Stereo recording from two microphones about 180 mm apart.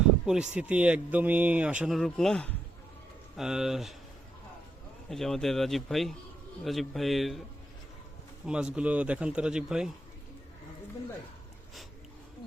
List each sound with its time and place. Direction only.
0.3 s a man's voice: 5° right (ahead or behind)
5.0 s speech: centre (ahead or behind)
8.4 s speech: 5° right (ahead or behind)